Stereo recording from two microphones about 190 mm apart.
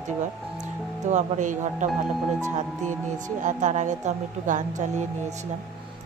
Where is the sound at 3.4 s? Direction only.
40° right (ahead or behind).